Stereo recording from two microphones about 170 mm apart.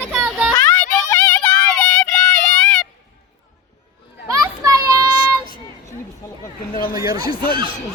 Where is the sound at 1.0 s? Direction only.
20° left (ahead or behind).